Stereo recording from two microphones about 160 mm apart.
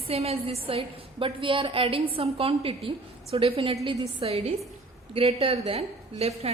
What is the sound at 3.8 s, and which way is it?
Speech, 20° right (ahead or behind).